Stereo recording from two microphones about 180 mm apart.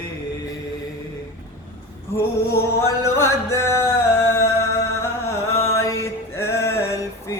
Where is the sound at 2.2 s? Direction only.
15° left (ahead or behind).